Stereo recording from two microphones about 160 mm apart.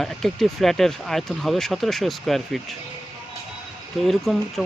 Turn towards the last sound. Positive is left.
turn(degrees=0)  # may be behind; listen again after turning